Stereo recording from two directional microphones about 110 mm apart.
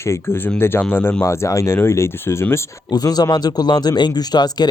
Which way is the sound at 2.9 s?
35° left (ahead or behind).